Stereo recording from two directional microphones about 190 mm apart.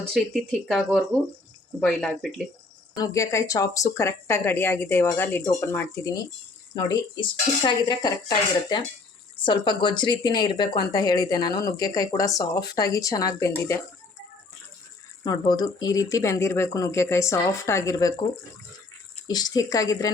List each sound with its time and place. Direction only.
0.1 s speech: centre (ahead or behind)
2.9 s speech: 20° left (ahead or behind)
6.7 s speech: 20° left (ahead or behind)
15.2 s speech: 20° left (ahead or behind)
19.3 s speech: 20° left (ahead or behind)